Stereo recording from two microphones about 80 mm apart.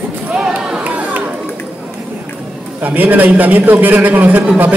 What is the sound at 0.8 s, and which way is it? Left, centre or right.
Music, centre.